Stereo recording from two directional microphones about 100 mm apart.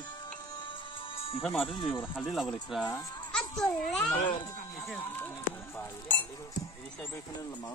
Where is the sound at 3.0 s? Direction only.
40° left (ahead or behind).